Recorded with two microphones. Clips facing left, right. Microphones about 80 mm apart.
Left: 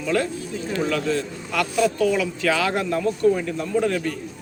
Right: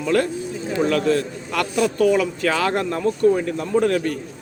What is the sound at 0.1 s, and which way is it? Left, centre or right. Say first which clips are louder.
A man's voice: right 4 dB; right.